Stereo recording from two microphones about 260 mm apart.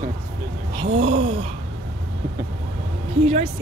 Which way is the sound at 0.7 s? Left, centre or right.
Centre.